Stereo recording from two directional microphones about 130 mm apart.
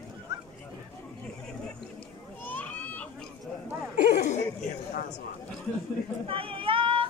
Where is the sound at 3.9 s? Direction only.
65° left (ahead or behind).